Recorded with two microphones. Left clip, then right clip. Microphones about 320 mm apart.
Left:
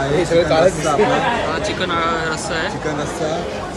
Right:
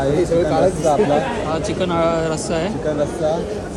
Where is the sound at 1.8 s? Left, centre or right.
Centre.